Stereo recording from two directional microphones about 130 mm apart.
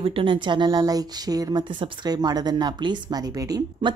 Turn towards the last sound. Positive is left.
turn(degrees=-30)  # may be behind; listen again after turning